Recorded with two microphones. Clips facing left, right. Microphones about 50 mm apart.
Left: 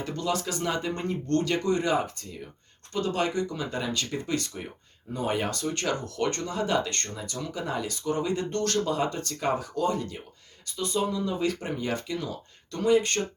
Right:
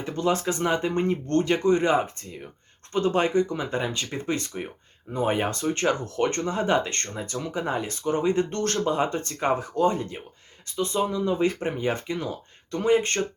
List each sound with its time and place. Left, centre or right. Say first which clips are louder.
0.0 s speech: right 4 dB; right